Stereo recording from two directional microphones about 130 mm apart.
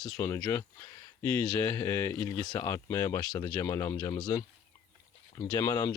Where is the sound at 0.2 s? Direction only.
25° left (ahead or behind).